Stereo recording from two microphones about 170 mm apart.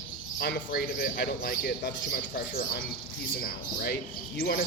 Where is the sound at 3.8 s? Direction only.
65° left (ahead or behind).